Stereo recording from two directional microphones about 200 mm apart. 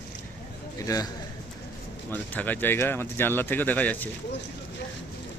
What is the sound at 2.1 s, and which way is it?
Speech, 10° left (ahead or behind).